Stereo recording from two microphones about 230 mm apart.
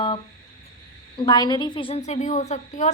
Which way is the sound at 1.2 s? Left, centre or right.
Centre.